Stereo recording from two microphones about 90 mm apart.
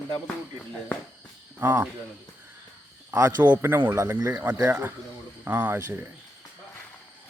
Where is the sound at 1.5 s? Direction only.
30° right (ahead or behind).